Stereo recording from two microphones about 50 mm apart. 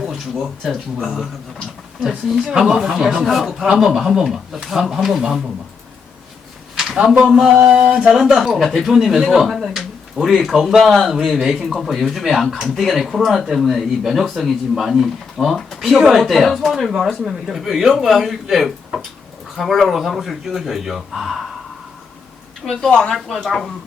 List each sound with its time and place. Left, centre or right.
1.0 s speech: centre
3.2 s speech: centre
6.7 s a sound: centre
7.3 s speech: centre
7.7 s speech: right
8.1 s speech: centre
11.6 s speech: centre
22.6 s speech: centre